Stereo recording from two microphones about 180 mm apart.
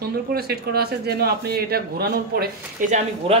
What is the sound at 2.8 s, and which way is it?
Speech, 45° right (ahead or behind).